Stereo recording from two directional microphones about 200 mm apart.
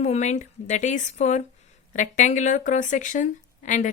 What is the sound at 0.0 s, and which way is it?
Speech, 35° left (ahead or behind).